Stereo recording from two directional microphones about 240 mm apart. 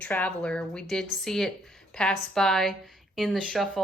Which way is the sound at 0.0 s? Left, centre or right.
Centre.